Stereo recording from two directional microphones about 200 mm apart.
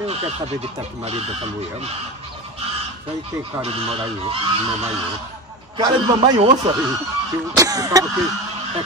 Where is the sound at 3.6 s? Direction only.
30° right (ahead or behind).